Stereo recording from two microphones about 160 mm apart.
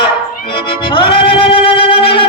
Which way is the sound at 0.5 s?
35° left (ahead or behind).